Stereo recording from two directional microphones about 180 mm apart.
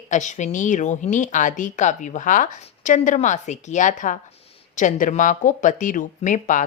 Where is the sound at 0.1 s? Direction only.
40° left (ahead or behind).